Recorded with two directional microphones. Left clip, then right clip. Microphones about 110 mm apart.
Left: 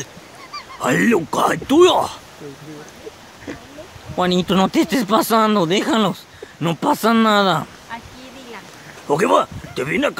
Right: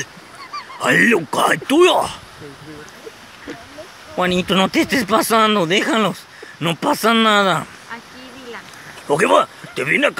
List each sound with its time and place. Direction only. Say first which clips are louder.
0.7 s speech: right 3 dB; 20° left (ahead or behind)
4.2 s speech: right 1 dB; 20° left (ahead or behind)
9.1 s speech: right 2 dB; 15° left (ahead or behind)